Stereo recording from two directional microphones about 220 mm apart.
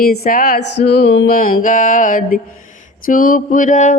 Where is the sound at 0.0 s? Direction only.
40° left (ahead or behind).